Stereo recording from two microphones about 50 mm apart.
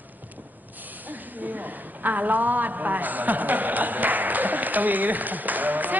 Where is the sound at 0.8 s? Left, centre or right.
Right.